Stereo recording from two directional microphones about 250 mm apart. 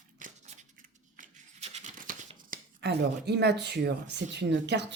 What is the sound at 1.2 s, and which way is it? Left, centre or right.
A woman's voice, right.